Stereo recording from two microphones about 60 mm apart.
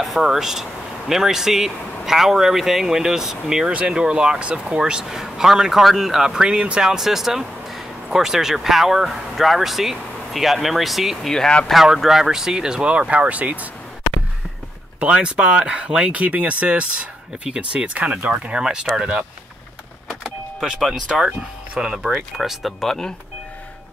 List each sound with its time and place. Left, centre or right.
0.0 s speech: centre
11.3 s speech: centre
11.7 s speech: centre; by 13.7 s right
15.0 s speech: centre
20.1 s vehicle: centre
21.3 s speech: centre